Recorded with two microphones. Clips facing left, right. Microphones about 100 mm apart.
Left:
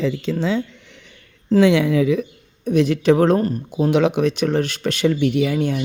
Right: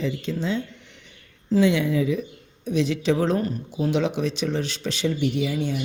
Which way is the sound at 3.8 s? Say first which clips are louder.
Left 6 dB; 65° left (ahead or behind).